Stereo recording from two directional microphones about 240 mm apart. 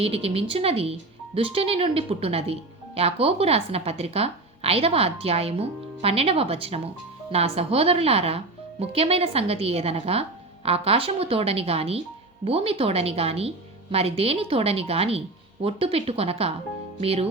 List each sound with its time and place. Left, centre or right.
0.0 s speech: right